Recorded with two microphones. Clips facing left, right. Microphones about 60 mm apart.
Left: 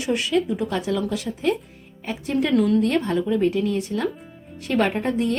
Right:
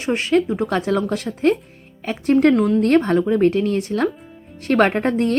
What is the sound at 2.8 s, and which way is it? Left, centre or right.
Speech, right.